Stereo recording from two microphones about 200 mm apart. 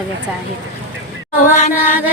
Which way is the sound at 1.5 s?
35° left (ahead or behind).